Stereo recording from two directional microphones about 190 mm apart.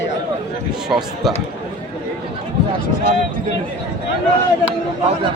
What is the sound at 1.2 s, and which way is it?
Speech, centre (ahead or behind).